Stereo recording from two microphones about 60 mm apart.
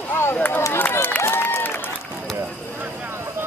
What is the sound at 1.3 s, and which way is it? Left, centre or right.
Applause, left.